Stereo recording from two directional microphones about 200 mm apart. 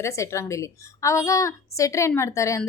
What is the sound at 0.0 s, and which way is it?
A woman's voice, 15° left (ahead or behind).